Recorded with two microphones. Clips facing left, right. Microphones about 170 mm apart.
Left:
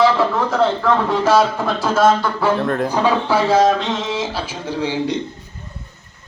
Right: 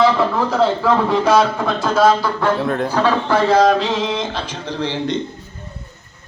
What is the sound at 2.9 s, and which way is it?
Speech, 15° left (ahead or behind).